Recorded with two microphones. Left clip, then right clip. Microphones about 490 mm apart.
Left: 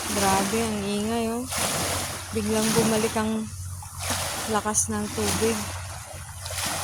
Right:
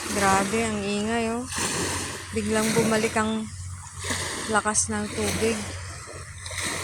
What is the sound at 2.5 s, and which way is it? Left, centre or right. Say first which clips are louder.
Speech: even; left.